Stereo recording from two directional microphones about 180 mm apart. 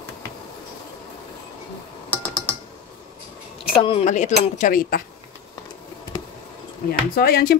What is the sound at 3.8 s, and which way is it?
Speech, 30° left (ahead or behind).